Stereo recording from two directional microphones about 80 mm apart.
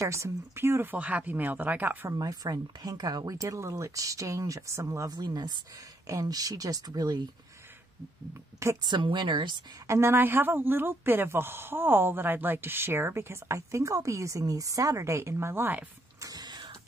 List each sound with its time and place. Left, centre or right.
0.0 s speech: right
0.9 s speech: centre
2.1 s speech: right
6.0 s speech: right
8.8 s a woman's voice: right
9.8 s speech: right
16.2 s printer: right